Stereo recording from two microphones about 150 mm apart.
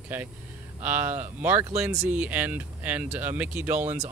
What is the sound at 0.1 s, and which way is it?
Speech, 10° right (ahead or behind).